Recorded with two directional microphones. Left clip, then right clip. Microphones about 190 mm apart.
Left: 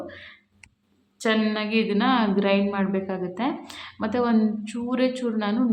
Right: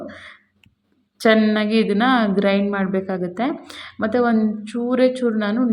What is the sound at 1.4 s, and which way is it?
A woman's voice, 25° right (ahead or behind).